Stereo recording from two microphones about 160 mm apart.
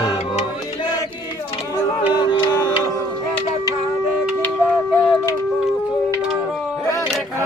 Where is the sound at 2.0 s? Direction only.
30° left (ahead or behind).